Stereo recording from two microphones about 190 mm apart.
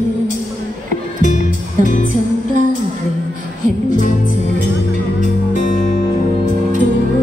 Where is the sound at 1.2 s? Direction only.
45° left (ahead or behind).